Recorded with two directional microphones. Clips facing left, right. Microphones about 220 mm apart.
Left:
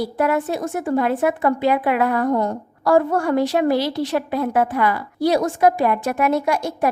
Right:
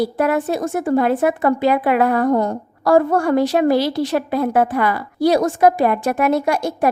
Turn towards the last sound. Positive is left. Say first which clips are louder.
# right 2 dB
turn(degrees=-40)  # may be behind; listen again after turning